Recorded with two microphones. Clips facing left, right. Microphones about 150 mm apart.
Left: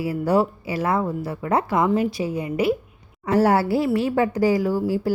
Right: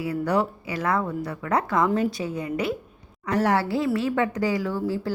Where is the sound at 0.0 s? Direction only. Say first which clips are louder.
Left 4 dB; 25° left (ahead or behind).